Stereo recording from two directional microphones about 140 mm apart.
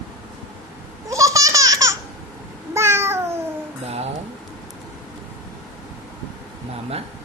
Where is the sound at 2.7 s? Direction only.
20° right (ahead or behind).